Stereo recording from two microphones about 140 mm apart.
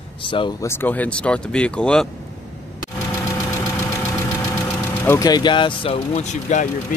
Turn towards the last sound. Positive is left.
turn(degrees=60)  # may be behind; listen again after turning